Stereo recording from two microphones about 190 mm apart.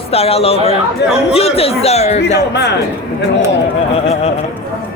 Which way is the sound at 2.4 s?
65° left (ahead or behind).